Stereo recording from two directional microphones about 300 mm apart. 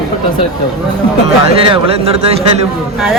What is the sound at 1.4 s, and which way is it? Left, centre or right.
Speech, centre.